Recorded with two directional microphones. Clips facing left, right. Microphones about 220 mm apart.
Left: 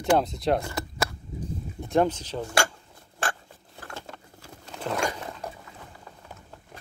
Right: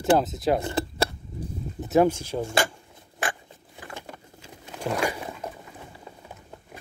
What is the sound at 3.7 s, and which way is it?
Patter, 10° right (ahead or behind).